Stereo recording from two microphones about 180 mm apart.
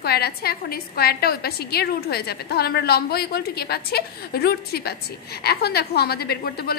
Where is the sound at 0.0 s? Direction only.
60° left (ahead or behind).